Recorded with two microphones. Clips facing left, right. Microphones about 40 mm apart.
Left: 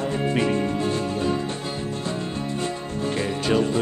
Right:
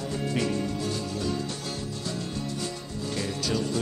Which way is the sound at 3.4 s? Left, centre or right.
Left.